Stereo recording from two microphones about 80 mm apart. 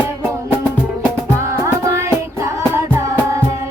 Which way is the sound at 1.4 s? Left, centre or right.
Right.